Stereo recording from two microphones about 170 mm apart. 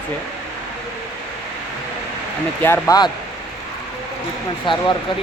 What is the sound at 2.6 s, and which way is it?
Speech, 15° left (ahead or behind).